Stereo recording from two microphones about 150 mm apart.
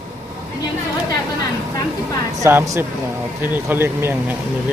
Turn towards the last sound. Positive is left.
turn(degrees=-15)  # may be behind; listen again after turning